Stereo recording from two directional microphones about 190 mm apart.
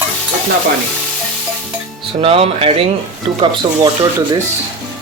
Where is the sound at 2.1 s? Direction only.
30° right (ahead or behind).